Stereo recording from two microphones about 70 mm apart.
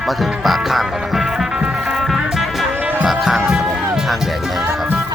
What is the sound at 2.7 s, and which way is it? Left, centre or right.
Music, right.